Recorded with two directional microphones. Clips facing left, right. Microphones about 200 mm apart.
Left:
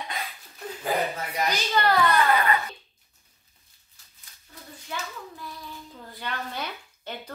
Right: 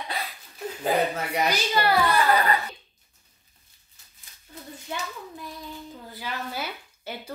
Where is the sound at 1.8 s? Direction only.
10° right (ahead or behind).